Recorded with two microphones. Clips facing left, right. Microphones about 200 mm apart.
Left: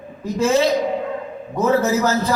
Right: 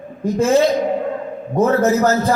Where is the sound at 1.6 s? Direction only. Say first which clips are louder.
Right 3 dB; 50° right (ahead or behind).